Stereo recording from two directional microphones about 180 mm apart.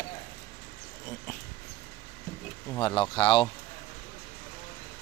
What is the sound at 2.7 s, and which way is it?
Speech, 25° left (ahead or behind).